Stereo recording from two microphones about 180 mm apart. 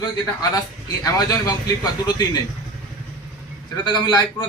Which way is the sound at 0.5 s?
20° left (ahead or behind).